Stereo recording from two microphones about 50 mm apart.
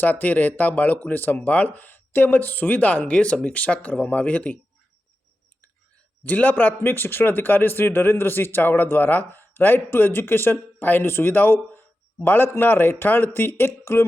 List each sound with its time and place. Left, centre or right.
0.0 s speech: left
1.4 s speech: left
6.2 s a man's voice: left